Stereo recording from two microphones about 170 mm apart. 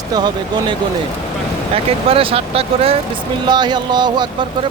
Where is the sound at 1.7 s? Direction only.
35° right (ahead or behind).